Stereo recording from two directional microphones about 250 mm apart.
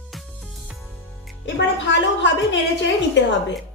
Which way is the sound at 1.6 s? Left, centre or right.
Left.